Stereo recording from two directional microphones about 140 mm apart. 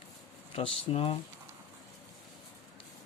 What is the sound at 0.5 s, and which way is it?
Speech, 40° left (ahead or behind).